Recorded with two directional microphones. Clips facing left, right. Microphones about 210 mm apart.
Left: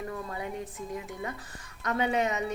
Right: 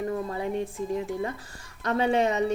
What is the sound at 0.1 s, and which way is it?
Speech, 30° right (ahead or behind).